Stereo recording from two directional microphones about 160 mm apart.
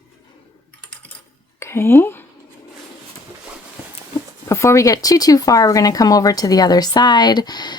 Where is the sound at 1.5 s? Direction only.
15° left (ahead or behind).